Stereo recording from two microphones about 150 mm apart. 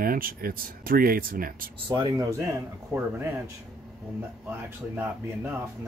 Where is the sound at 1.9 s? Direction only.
25° right (ahead or behind).